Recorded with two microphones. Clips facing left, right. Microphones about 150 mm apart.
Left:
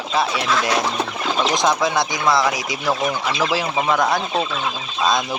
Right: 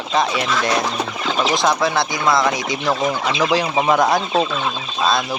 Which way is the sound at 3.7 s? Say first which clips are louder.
Right 3 dB; 20° right (ahead or behind).